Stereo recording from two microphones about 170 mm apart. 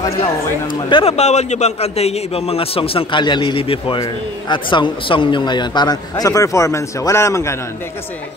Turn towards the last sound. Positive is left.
turn(degrees=15)  # may be behind; listen again after turning